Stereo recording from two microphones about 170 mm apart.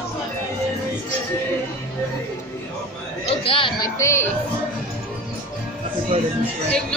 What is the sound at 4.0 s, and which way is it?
Speech, 15° left (ahead or behind).